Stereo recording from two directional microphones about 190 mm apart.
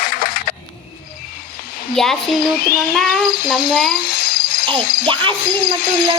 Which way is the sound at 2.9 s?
Centre (ahead or behind).